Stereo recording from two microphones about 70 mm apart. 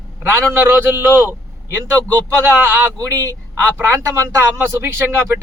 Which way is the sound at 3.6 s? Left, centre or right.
Right.